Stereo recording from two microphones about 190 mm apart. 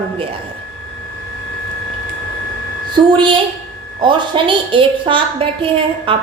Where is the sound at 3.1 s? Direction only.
25° right (ahead or behind).